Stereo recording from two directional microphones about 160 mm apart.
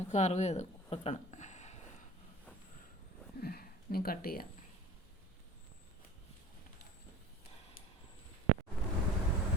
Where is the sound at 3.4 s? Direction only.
75° left (ahead or behind).